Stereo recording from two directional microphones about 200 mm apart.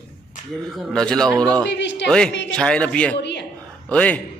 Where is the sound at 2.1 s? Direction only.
5° left (ahead or behind).